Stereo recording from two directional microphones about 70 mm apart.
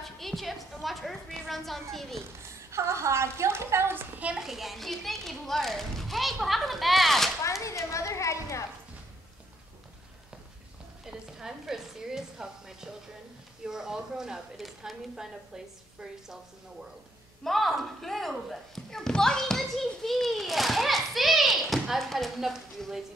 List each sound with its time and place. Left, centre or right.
0.0 s a sound: centre
2.7 s a woman's voice: right
4.2 s a child's voice: centre
4.5 s speech: centre
7.6 s children playing: left
11.1 s a sound: centre
13.7 s a woman's voice: centre
17.4 s a child's voice: centre